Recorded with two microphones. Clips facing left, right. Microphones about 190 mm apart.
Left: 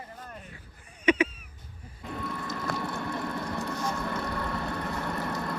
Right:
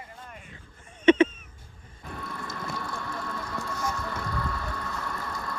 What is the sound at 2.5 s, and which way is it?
Vehicle, 20° left (ahead or behind).